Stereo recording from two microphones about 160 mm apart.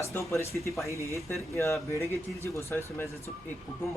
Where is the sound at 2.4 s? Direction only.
15° left (ahead or behind).